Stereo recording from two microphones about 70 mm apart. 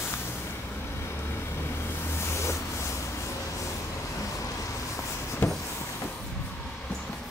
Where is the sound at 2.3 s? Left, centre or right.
Left.